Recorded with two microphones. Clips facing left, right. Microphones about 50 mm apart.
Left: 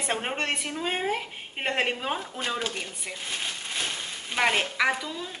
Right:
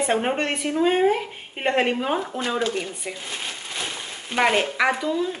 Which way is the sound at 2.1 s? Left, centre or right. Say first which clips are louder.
Right 8 dB; right.